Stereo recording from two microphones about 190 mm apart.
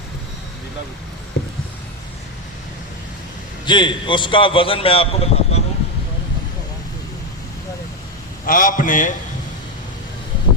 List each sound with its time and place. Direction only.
1.4 s a sound: 60° left (ahead or behind)
3.7 s a man's voice: 25° left (ahead or behind)
8.4 s a man's voice: 45° left (ahead or behind)